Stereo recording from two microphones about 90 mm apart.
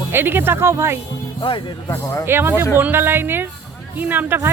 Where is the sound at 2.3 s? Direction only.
25° right (ahead or behind).